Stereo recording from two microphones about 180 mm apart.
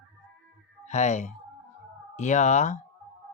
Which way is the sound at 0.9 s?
40° left (ahead or behind).